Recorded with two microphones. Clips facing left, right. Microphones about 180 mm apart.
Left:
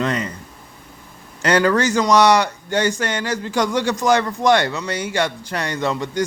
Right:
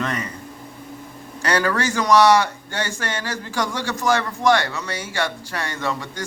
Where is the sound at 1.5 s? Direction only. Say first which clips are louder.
Left 5 dB; 20° left (ahead or behind).